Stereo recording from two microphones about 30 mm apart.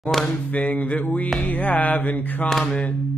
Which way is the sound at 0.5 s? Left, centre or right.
Left.